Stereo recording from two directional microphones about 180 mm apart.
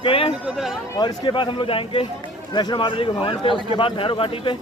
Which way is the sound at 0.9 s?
25° left (ahead or behind).